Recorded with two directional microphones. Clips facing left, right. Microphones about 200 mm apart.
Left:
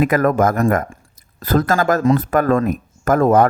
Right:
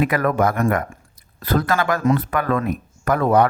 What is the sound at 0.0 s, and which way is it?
Speech, 45° left (ahead or behind).